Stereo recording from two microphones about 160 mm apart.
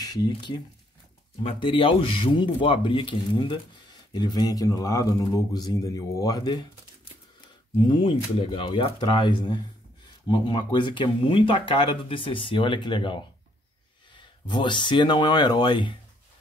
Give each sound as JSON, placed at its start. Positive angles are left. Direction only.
{"t": 0.0, "sound": "speech", "side_deg": 25}
{"t": 1.4, "sound": "speech", "side_deg": 35}
{"t": 7.9, "sound": "speech", "side_deg": 30}
{"t": 14.5, "sound": "speech", "side_deg": 30}